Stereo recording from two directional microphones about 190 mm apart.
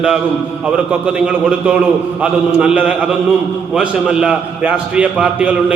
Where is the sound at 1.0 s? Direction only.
5° right (ahead or behind).